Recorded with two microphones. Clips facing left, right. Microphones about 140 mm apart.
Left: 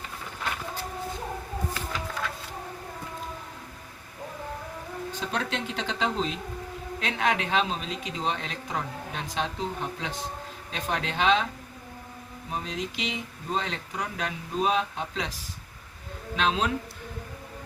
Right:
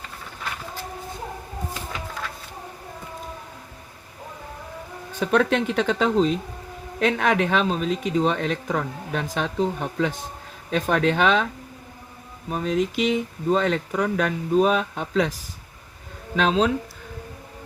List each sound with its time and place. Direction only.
5.2 s speech: 60° right (ahead or behind)
12.5 s speech: 50° right (ahead or behind)
16.3 s speech: 45° right (ahead or behind)